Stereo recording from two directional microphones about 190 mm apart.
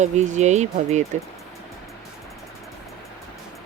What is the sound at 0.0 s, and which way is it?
Speech, 40° right (ahead or behind).